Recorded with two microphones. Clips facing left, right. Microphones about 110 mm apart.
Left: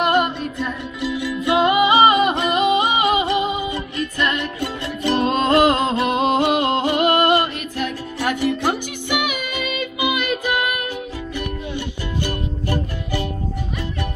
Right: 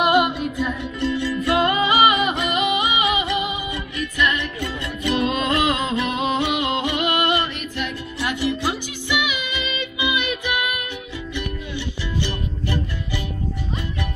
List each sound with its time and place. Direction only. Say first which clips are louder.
0.0 s music: even; 5° right (ahead or behind)
1.0 s music: even; 10° left (ahead or behind)
2.0 s music: left 3 dB; 35° left (ahead or behind)